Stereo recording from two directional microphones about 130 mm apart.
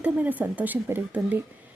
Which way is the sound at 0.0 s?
10° right (ahead or behind).